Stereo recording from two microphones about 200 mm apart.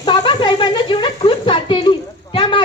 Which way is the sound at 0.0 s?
20° left (ahead or behind).